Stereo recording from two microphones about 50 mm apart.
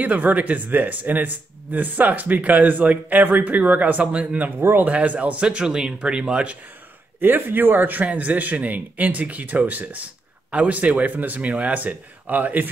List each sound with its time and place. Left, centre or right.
0.0 s speech: right
4.6 s speech: right
4.8 s speech: right
7.2 s speech: right